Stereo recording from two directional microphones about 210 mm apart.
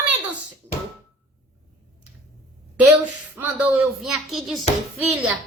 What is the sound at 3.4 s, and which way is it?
A child's voice, 5° right (ahead or behind).